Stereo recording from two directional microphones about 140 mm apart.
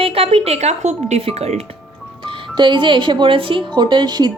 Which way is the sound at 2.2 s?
35° right (ahead or behind).